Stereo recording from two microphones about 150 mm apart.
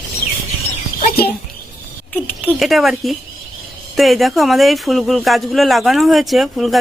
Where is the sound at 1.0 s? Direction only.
90° left.